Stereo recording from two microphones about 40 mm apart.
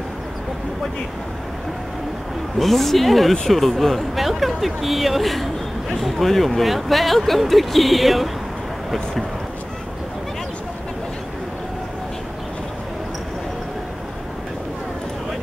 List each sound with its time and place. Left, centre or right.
2.6 s speech: centre